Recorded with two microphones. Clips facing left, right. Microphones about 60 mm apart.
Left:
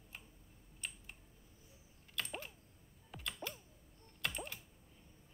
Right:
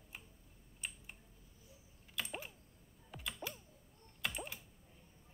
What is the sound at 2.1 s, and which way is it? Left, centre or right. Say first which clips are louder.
Typing: even; centre.